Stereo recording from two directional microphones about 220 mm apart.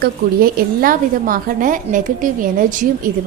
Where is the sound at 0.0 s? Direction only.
40° right (ahead or behind).